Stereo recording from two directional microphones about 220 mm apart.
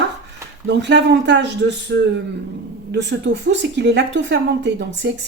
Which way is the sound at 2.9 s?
50° right (ahead or behind).